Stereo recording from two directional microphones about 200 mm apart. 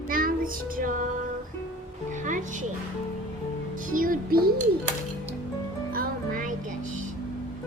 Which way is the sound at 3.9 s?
45° right (ahead or behind).